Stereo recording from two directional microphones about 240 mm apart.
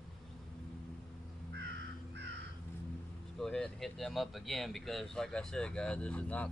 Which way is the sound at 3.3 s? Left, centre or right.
Centre.